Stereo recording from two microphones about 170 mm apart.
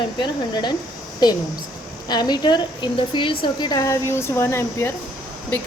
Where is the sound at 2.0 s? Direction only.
25° left (ahead or behind).